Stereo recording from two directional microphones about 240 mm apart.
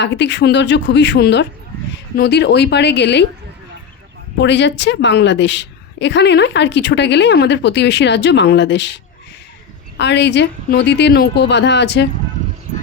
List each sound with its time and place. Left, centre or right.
0.0 s a woman's voice: left
4.4 s a woman's voice: left
10.0 s a woman's voice: left